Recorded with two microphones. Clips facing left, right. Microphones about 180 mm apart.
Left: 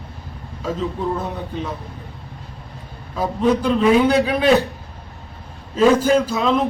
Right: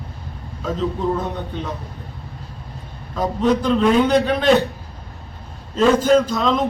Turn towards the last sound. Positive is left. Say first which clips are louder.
# right 1 dB
turn(degrees=5)  # may be behind; listen again after turning